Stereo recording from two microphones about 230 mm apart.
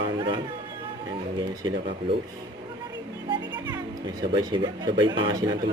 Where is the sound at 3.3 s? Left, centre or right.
Centre.